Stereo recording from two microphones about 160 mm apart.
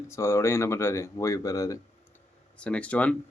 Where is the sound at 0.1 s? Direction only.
15° left (ahead or behind).